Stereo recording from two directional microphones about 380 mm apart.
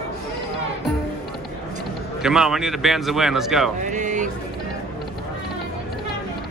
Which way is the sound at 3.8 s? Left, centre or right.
Centre.